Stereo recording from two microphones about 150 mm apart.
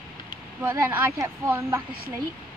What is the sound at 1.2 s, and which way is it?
Speech, 20° right (ahead or behind).